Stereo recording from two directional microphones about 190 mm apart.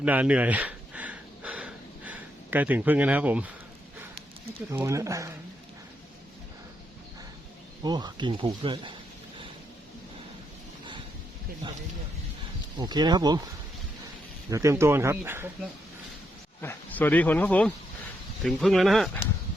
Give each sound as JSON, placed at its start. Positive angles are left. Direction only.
{"t": 0.0, "sound": "a sound", "side_deg": -5}
{"t": 4.7, "sound": "speech", "side_deg": -15}
{"t": 7.9, "sound": "speech", "side_deg": -20}
{"t": 11.6, "sound": "speech", "side_deg": -25}
{"t": 14.5, "sound": "speech", "side_deg": -15}
{"t": 16.6, "sound": "speech", "side_deg": 10}